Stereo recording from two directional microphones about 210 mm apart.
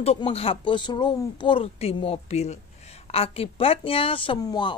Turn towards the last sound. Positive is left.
turn(degrees=20)  # may be behind; listen again after turning